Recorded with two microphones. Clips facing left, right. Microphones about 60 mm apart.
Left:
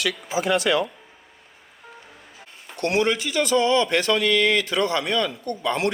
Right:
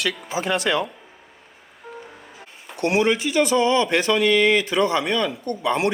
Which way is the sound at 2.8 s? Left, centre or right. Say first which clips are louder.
Right 2 dB; centre.